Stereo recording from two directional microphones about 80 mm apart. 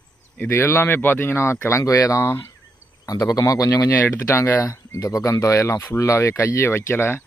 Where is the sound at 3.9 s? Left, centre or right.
Left.